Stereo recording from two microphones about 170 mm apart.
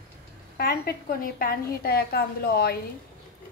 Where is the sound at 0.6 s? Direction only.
60° left (ahead or behind).